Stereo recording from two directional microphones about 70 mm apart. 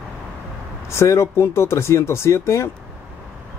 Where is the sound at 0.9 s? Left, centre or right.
Left.